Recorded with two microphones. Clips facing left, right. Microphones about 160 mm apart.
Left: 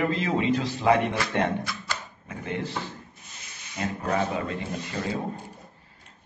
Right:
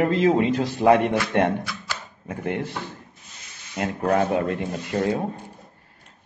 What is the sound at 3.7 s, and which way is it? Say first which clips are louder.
Speech: right 5 dB; 60° right (ahead or behind).